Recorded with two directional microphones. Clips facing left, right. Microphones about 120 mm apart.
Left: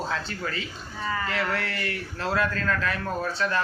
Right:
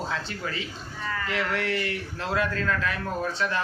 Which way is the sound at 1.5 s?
20° right (ahead or behind).